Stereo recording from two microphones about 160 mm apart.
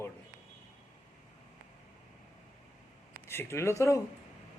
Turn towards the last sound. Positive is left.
turn(degrees=20)  # may be behind; listen again after turning